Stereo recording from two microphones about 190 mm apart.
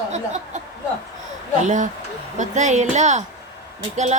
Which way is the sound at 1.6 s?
40° right (ahead or behind).